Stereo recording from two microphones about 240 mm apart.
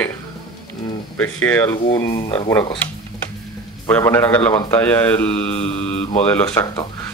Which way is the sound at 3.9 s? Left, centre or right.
Centre.